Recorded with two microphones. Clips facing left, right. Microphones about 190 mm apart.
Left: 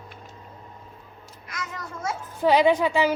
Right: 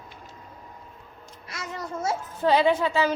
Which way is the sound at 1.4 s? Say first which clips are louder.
Right 1 dB; 30° right (ahead or behind).